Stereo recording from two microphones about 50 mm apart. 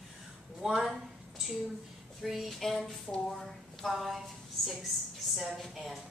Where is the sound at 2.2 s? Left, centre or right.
Centre.